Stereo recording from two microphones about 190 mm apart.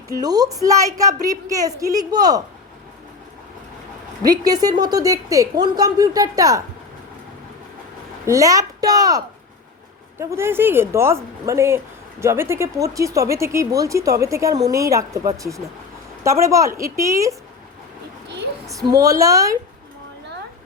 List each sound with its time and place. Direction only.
0.1 s a woman's voice: 20° right (ahead or behind)
4.2 s a woman's voice: 20° right (ahead or behind)
8.3 s a woman's voice: 15° right (ahead or behind)
18.9 s speech: 20° right (ahead or behind)